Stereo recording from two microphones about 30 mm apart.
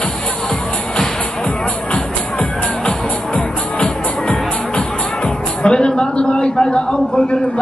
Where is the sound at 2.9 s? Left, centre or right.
Left.